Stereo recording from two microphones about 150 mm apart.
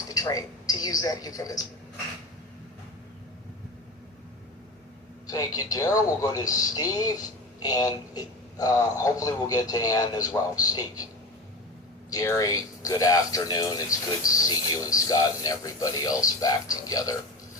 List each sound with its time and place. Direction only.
0.1 s a woman's voice: 25° left (ahead or behind)
5.2 s a man's voice: 25° left (ahead or behind)
12.1 s a man's voice: 20° left (ahead or behind)